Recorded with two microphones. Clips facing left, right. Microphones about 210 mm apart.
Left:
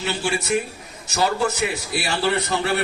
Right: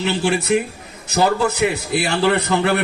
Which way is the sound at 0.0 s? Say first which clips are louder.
Right 5 dB; 60° right (ahead or behind).